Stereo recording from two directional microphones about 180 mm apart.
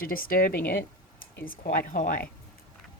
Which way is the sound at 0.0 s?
50° left (ahead or behind).